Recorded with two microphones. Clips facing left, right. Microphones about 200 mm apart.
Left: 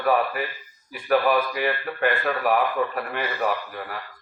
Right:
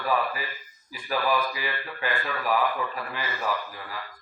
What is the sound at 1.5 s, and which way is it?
A man's voice, 60° left (ahead or behind).